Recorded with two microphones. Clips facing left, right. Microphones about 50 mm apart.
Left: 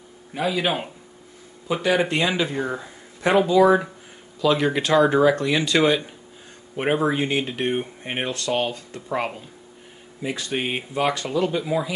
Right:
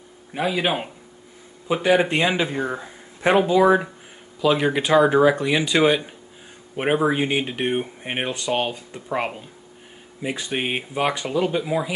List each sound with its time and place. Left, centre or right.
0.3 s speech: centre